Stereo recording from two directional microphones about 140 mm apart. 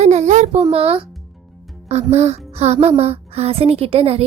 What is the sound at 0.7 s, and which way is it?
A woman's voice, 45° right (ahead or behind).